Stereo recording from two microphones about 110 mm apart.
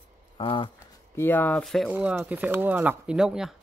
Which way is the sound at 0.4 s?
50° left (ahead or behind).